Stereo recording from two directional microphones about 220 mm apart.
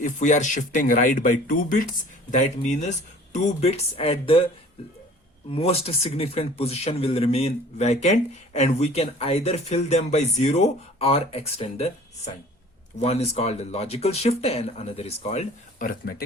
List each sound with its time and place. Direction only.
0.0 s speech: 35° left (ahead or behind)
5.5 s speech: 25° left (ahead or behind); by 16.2 s 40° left (ahead or behind)